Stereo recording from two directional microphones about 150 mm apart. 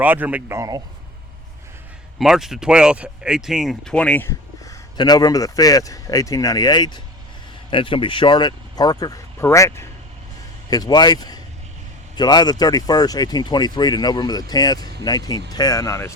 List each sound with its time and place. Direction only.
0.0 s speech: 10° right (ahead or behind)
2.1 s speech: 5° right (ahead or behind); by 16.1 s 20° left (ahead or behind)